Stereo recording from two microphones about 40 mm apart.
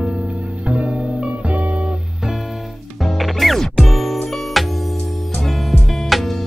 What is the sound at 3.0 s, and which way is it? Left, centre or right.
Music, centre.